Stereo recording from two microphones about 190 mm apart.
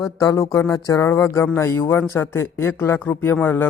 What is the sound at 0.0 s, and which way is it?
A man's voice, 20° left (ahead or behind).